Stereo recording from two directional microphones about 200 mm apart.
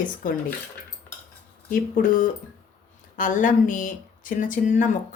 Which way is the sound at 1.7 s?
40° left (ahead or behind).